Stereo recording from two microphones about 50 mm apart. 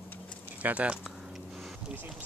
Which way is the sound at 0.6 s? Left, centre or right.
Right.